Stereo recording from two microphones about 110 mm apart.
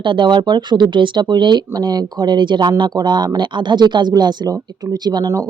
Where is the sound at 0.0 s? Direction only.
45° right (ahead or behind).